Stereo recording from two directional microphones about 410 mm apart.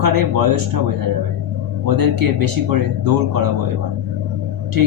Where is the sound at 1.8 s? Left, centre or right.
Right.